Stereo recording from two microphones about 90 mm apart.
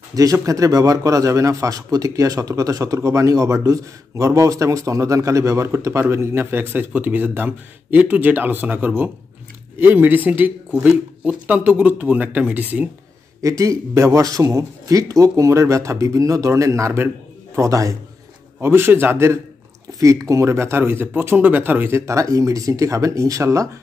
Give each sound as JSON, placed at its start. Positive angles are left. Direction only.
{"t": 0.1, "sound": "a man's voice", "side_deg": -40}
{"t": 13.4, "sound": "a man's voice", "side_deg": -35}
{"t": 18.6, "sound": "speech", "side_deg": -25}
{"t": 20.0, "sound": "a man's voice", "side_deg": -35}